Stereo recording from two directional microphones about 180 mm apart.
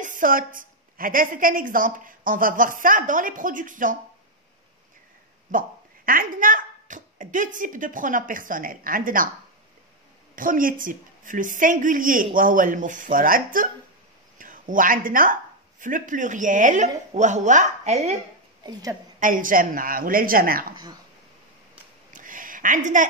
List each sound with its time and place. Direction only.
0.0 s a woman's voice: 50° right (ahead or behind)
5.5 s speech: 50° right (ahead or behind)
10.3 s a woman's voice: 50° right (ahead or behind)
18.7 s a woman's voice: 20° right (ahead or behind)
19.1 s a woman's voice: 50° right (ahead or behind)
22.1 s a sound: 50° right (ahead or behind)